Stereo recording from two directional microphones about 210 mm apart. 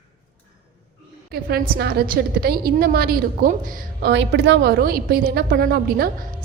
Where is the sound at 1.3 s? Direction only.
50° right (ahead or behind).